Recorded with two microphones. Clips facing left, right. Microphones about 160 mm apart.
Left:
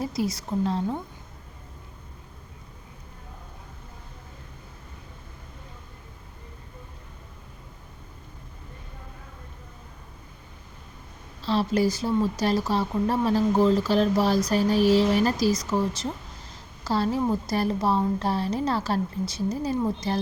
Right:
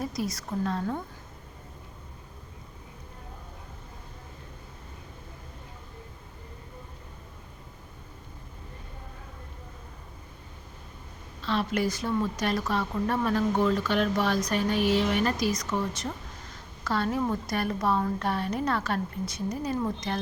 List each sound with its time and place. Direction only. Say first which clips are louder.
0.0 s a sound: left 4 dB; 30° left (ahead or behind)
0.6 s a woman's voice: left 3 dB; 25° left (ahead or behind)
11.4 s a woman's voice: left 4 dB; 35° left (ahead or behind)